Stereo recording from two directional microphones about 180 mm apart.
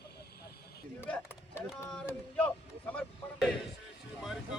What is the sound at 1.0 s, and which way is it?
Chop, 10° left (ahead or behind).